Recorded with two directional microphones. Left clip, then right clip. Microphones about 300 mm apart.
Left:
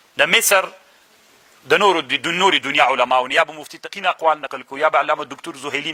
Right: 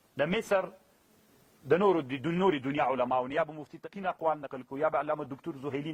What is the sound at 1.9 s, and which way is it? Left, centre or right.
A man's voice, centre.